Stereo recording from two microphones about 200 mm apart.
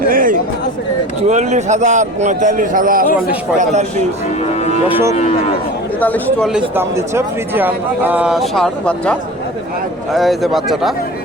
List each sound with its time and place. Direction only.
0.1 s chatter: 45° right (ahead or behind)
1.3 s a man's voice: 35° right (ahead or behind)
4.4 s speech: 35° left (ahead or behind)
6.0 s speech: 10° left (ahead or behind)
6.5 s a man's voice: 10° right (ahead or behind)